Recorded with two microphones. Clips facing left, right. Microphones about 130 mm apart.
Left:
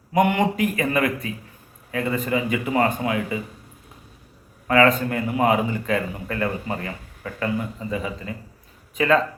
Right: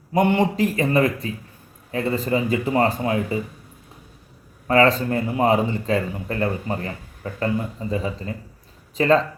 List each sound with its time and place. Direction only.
0.1 s a man's voice: 30° right (ahead or behind)
4.7 s a man's voice: 30° right (ahead or behind)